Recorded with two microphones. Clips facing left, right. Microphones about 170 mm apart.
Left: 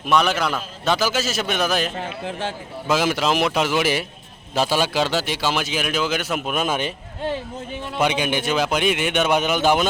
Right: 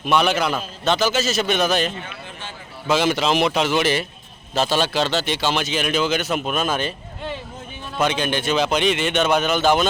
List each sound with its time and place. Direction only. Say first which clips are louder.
0.0 s a man's voice: right 1 dB; centre (ahead or behind)
2.0 s a man's voice: left 8 dB; 90° left
2.9 s a man's voice: right 1 dB; 5° left (ahead or behind)
7.9 s a man's voice: even; 15° left (ahead or behind)